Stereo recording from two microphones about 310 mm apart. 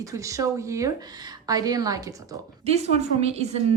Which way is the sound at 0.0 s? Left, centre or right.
Centre.